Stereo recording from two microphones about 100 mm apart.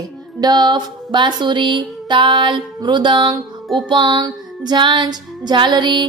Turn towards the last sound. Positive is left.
turn(degrees=-50)  # may be behind; listen again after turning